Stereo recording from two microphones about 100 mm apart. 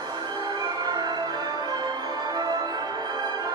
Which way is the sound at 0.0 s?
45° right (ahead or behind).